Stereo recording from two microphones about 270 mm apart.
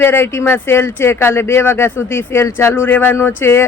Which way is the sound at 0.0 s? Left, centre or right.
Centre.